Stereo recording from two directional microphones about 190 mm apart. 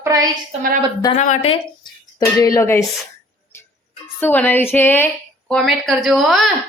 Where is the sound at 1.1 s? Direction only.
40° left (ahead or behind).